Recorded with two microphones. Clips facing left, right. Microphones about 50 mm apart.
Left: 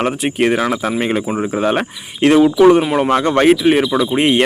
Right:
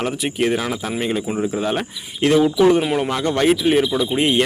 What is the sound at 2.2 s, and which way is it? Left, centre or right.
Speech, left.